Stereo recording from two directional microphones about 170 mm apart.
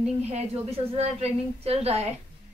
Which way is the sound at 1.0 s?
40° right (ahead or behind).